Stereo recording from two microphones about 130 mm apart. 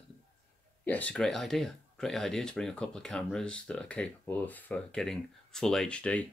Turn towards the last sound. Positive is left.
turn(degrees=10)  # may be behind; listen again after turning